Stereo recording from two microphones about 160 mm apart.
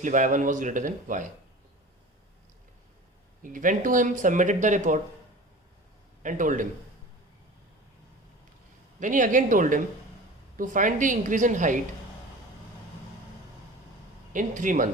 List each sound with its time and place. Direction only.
0.0 s speech: 50° right (ahead or behind)
3.4 s speech: 55° right (ahead or behind)
6.2 s speech: 55° right (ahead or behind)
9.0 s a woman's voice: 55° right (ahead or behind)
14.3 s a woman's voice: 55° right (ahead or behind)